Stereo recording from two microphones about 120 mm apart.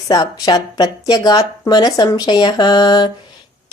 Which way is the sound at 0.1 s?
30° left (ahead or behind).